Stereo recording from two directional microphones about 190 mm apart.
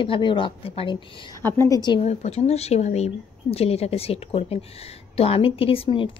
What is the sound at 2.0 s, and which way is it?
A woman's voice, 35° left (ahead or behind).